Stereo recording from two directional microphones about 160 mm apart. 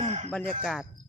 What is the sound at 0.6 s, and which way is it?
Speech, centre (ahead or behind).